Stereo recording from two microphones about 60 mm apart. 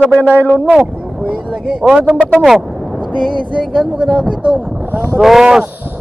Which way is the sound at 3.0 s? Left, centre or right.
Centre.